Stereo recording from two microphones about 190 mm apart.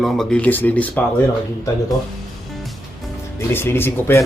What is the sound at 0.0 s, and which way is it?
Speech, 5° left (ahead or behind).